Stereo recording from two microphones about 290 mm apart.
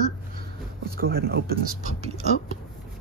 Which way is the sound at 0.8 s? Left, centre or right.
Right.